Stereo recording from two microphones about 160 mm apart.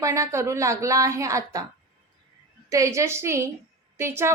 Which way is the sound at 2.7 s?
20° right (ahead or behind).